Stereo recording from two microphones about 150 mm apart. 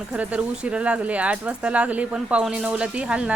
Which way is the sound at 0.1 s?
10° right (ahead or behind).